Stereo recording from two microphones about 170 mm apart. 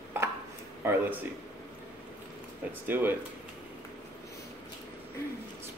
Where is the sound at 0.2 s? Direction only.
15° right (ahead or behind).